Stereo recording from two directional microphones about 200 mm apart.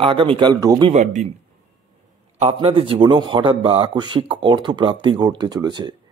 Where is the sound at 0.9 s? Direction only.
35° right (ahead or behind).